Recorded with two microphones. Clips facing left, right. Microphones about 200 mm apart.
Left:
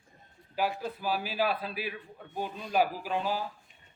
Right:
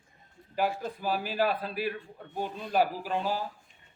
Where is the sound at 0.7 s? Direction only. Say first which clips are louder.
Right 1 dB; 10° left (ahead or behind).